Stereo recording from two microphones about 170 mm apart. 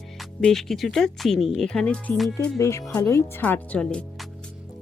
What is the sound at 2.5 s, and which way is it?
Speech, 15° left (ahead or behind).